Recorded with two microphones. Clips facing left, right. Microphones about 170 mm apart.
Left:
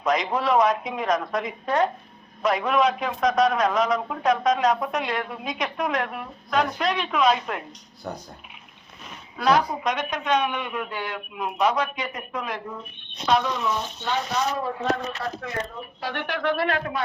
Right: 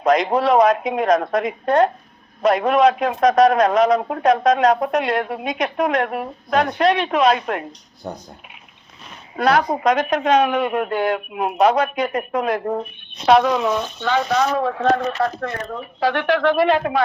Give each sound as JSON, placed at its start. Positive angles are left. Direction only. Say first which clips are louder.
{"t": 0.0, "sound": "a sound", "louder": "right 7 dB", "side_deg": -70}
{"t": 0.3, "sound": "a man's voice", "louder": "right 6 dB", "side_deg": -40}
{"t": 0.6, "sound": "a man's voice", "louder": "right 6 dB", "side_deg": -65}
{"t": 2.4, "sound": "a man's voice", "louder": "right 6 dB", "side_deg": -45}
{"t": 2.8, "sound": "a man's voice", "louder": "right 7 dB", "side_deg": -65}
{"t": 8.0, "sound": "speech", "louder": "right 3 dB", "side_deg": -25}
{"t": 9.3, "sound": "a woman's voice", "louder": "right 4 dB", "side_deg": -65}
{"t": 13.2, "sound": "speech", "louder": "right 8 dB", "side_deg": -75}